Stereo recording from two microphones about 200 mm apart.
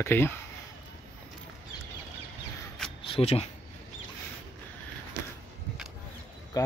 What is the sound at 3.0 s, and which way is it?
Speech, 30° left (ahead or behind).